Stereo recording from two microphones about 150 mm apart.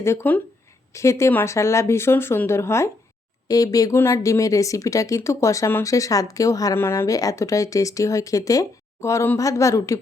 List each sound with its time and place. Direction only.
0.0 s speech: 15° left (ahead or behind)